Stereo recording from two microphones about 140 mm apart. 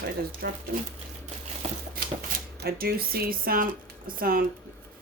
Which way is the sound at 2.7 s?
90° right.